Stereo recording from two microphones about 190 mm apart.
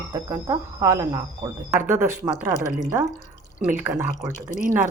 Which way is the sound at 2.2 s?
10° right (ahead or behind).